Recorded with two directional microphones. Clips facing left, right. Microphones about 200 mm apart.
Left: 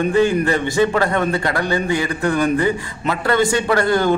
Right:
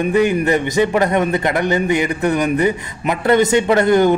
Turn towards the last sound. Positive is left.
turn(degrees=-20)  # may be behind; listen again after turning